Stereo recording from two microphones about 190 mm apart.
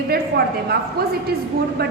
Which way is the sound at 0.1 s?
55° right (ahead or behind).